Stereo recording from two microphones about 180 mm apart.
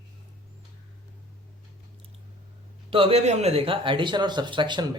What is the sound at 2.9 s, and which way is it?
Speech, 30° right (ahead or behind).